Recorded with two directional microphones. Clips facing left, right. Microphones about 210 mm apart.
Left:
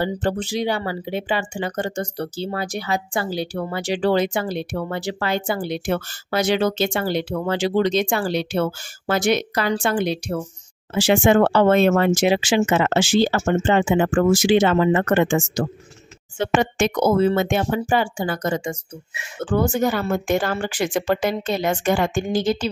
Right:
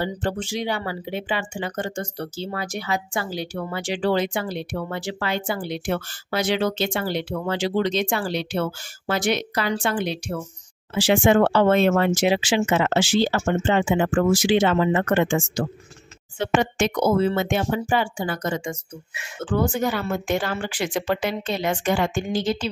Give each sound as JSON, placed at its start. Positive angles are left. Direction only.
{"t": 0.0, "sound": "speech", "side_deg": 35}